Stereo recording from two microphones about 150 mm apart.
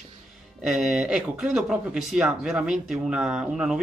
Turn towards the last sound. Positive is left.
turn(degrees=-5)  # may be behind; listen again after turning